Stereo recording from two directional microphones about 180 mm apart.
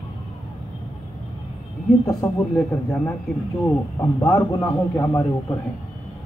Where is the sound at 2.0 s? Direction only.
15° left (ahead or behind).